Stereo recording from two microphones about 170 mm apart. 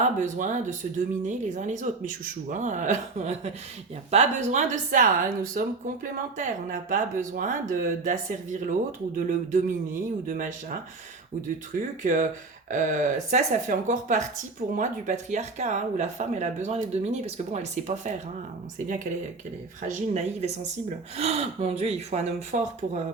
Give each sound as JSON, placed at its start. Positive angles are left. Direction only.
{"t": 0.0, "sound": "speech", "side_deg": -50}
{"t": 12.0, "sound": "speech", "side_deg": -45}
{"t": 19.9, "sound": "speech", "side_deg": -45}